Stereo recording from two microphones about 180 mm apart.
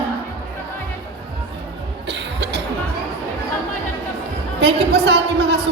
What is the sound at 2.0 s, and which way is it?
Cough, 75° right (ahead or behind).